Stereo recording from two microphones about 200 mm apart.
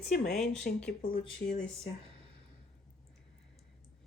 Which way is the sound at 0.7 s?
45° left (ahead or behind).